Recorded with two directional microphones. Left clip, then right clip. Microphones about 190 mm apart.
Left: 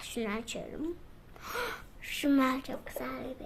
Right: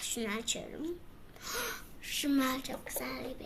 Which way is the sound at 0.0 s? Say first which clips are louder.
Even; 40° left (ahead or behind).